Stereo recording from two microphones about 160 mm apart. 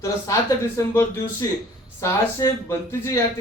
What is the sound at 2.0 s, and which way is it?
Speech, 15° left (ahead or behind).